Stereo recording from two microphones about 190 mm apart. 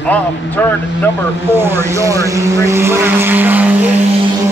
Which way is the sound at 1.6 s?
10° right (ahead or behind).